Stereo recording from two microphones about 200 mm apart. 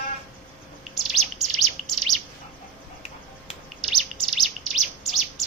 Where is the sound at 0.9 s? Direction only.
Centre (ahead or behind).